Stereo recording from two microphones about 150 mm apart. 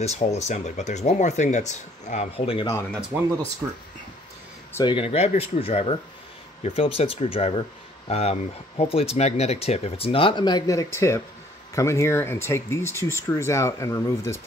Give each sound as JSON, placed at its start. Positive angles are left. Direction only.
{"t": 0.0, "sound": "speech", "side_deg": 45}
{"t": 3.1, "sound": "speech", "side_deg": -15}
{"t": 4.8, "sound": "speech", "side_deg": 35}